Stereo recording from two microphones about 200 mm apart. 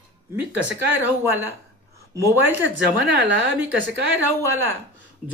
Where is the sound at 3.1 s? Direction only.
60° right (ahead or behind).